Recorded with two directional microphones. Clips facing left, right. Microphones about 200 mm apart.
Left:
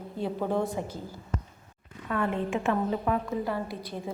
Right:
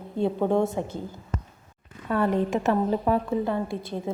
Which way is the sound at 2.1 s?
35° right (ahead or behind).